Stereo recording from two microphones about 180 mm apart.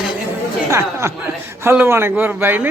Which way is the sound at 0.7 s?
15° right (ahead or behind).